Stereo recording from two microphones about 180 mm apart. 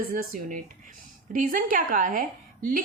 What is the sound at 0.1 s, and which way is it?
A woman's voice, 50° right (ahead or behind).